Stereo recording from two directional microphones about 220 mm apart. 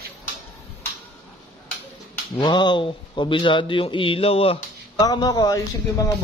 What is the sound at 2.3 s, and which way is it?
Speech, 20° left (ahead or behind).